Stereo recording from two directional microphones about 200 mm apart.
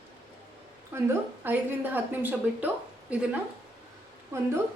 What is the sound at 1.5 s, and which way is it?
A woman's voice, 10° right (ahead or behind).